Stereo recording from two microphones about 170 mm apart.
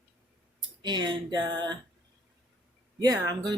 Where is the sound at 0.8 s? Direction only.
25° right (ahead or behind).